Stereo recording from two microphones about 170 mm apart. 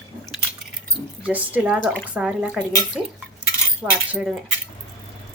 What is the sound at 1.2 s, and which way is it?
A woman's voice, 10° right (ahead or behind).